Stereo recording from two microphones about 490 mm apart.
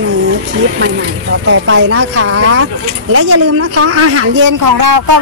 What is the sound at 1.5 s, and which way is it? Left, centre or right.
Speech, right.